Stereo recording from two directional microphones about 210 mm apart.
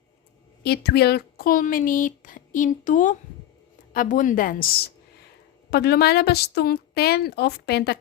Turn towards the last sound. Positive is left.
turn(degrees=50)  # may be behind; listen again after turning